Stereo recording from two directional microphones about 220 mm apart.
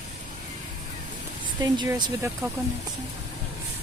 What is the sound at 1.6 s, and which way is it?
Speech, 20° right (ahead or behind).